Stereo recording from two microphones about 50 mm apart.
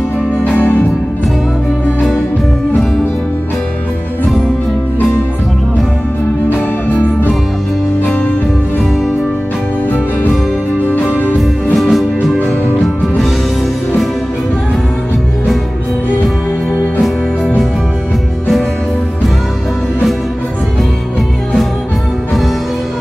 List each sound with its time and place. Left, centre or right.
0.4 s music: left
6.5 s music: left
11.3 s music: centre